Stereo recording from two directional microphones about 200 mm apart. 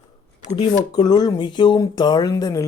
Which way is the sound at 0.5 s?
25° left (ahead or behind).